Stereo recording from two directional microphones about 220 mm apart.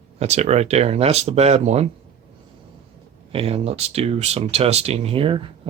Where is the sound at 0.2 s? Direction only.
30° right (ahead or behind).